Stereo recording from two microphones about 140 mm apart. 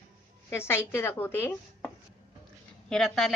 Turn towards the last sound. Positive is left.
turn(degrees=0)  # may be behind; listen again after turning